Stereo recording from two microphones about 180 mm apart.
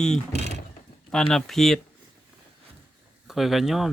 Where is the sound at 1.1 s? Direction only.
5° left (ahead or behind).